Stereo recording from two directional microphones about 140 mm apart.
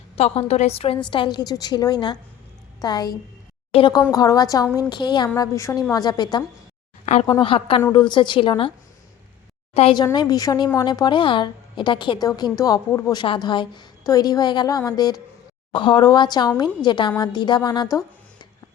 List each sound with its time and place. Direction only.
0.2 s a woman's voice: 45° left (ahead or behind); by 3.1 s 30° left (ahead or behind)
3.7 s a woman's voice: 40° left (ahead or behind)
4.1 s a woman's voice: 25° left (ahead or behind)
7.0 s a sound: 55° left (ahead or behind)
7.4 s a woman's voice: 40° left (ahead or behind)
9.9 s a woman's voice: 30° left (ahead or behind)
13.1 s a woman's voice: 35° left (ahead or behind)